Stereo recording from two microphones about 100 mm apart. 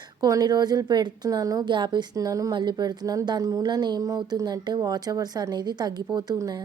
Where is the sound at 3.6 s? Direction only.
45° right (ahead or behind).